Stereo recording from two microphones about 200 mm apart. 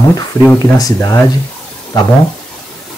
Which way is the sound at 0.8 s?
15° left (ahead or behind).